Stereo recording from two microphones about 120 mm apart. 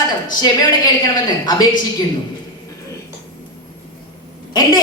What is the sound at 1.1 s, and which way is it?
Speech, 35° left (ahead or behind).